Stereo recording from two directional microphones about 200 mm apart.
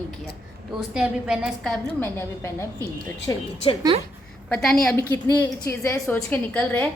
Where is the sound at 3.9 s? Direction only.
25° right (ahead or behind).